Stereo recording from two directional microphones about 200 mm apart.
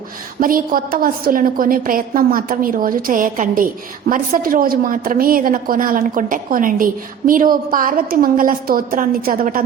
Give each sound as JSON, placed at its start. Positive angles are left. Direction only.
{"t": 0.3, "sound": "a woman's voice", "side_deg": -45}